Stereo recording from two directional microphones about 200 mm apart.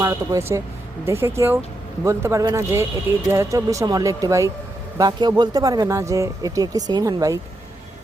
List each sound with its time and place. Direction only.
0.0 s a man's voice: 15° right (ahead or behind)